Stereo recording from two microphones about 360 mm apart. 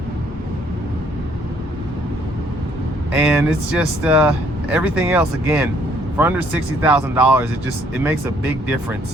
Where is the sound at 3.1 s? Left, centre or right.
Centre.